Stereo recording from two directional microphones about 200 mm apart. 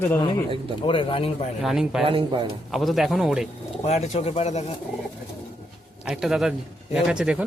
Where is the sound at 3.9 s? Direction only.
35° left (ahead or behind).